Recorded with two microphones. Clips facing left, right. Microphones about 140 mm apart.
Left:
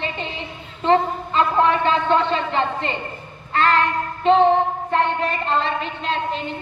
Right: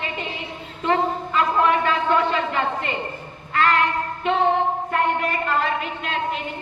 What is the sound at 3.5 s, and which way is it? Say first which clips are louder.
Child singing: left 1 dB; 30° left (ahead or behind).